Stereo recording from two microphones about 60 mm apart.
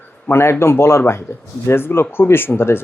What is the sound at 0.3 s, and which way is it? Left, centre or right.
Speech, left.